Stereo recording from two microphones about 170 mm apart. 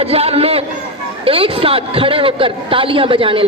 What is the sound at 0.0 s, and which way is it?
A man's voice, 35° right (ahead or behind).